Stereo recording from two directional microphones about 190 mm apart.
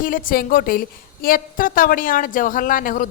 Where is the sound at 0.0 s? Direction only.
45° left (ahead or behind).